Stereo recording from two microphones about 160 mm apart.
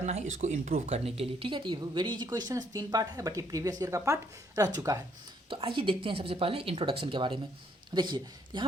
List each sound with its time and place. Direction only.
0.0 s speech: 45° right (ahead or behind); by 5.0 s 20° right (ahead or behind)
5.5 s a woman's voice: 30° right (ahead or behind)